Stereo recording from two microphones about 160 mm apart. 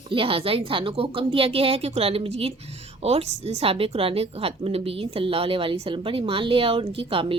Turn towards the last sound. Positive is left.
turn(degrees=-35)  # may be behind; listen again after turning